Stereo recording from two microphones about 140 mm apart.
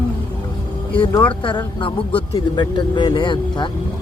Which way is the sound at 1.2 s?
35° left (ahead or behind).